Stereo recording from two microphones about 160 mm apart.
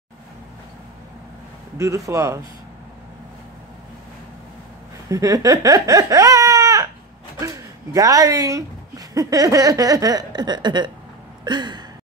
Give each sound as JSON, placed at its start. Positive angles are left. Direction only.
{"t": 1.8, "sound": "speech", "side_deg": -20}
{"t": 5.1, "sound": "a sound", "side_deg": -20}
{"t": 7.3, "sound": "speech", "side_deg": -20}